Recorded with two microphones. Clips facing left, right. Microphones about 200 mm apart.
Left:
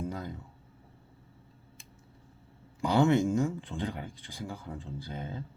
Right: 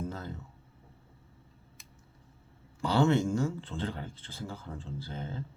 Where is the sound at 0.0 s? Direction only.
15° left (ahead or behind).